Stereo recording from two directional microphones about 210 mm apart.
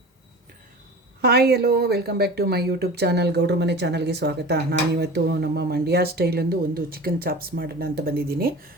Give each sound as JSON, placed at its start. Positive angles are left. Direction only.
{"t": 1.2, "sound": "speech", "side_deg": -50}